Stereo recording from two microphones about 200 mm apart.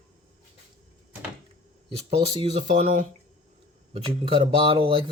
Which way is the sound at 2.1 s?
30° right (ahead or behind).